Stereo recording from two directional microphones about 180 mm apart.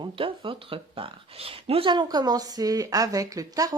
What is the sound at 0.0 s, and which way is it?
Speech, 30° right (ahead or behind).